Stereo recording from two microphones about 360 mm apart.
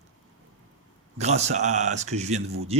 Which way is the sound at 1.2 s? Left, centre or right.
Centre.